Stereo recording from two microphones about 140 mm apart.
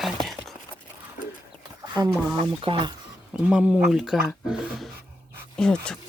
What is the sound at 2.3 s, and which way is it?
Speech, 40° right (ahead or behind).